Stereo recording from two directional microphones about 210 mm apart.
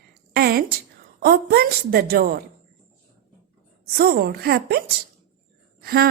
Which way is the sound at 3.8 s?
50° right (ahead or behind).